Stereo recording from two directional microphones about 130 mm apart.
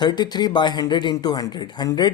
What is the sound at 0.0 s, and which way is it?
Speech, 35° left (ahead or behind).